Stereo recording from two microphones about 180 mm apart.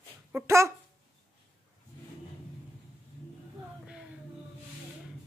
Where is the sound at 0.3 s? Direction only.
10° right (ahead or behind).